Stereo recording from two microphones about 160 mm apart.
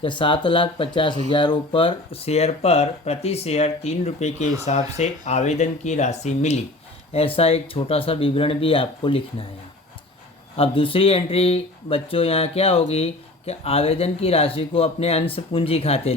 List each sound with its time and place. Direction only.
0.0 s speech: 30° left (ahead or behind)
10.6 s speech: 35° left (ahead or behind)